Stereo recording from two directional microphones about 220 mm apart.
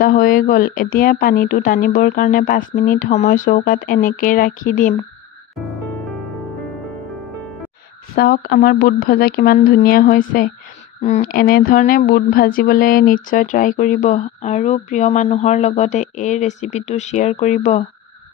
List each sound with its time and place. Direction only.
0.0 s speech: 40° left (ahead or behind)
8.1 s speech: 40° left (ahead or behind)